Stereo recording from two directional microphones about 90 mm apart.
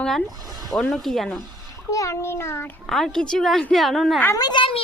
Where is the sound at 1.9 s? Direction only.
35° left (ahead or behind).